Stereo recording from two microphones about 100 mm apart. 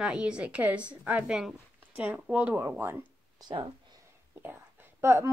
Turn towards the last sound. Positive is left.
turn(degrees=-25)  # may be behind; listen again after turning